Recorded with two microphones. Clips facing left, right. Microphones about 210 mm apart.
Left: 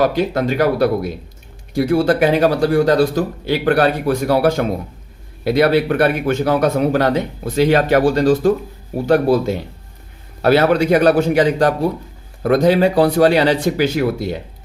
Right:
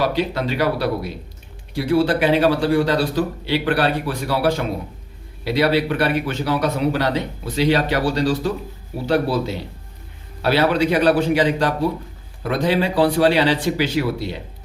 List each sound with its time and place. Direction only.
0.0 s speech: 45° left (ahead or behind)